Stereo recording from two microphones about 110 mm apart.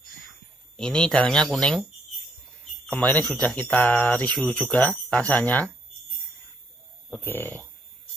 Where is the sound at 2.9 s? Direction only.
10° left (ahead or behind).